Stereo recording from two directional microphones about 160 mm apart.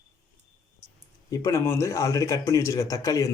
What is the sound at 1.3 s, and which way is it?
Speech, 20° left (ahead or behind).